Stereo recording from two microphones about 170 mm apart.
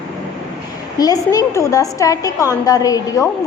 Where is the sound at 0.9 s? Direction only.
20° left (ahead or behind).